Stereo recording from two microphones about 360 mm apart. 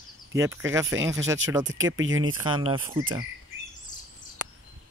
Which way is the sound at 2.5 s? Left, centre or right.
Centre.